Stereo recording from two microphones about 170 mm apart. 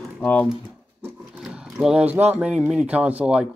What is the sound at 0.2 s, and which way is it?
Speech, 5° left (ahead or behind).